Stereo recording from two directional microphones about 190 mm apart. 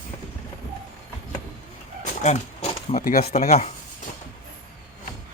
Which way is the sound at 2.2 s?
35° left (ahead or behind).